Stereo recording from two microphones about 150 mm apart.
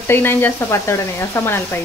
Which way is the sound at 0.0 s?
15° left (ahead or behind).